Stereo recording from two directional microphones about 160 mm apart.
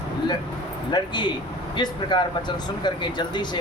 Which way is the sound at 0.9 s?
25° left (ahead or behind).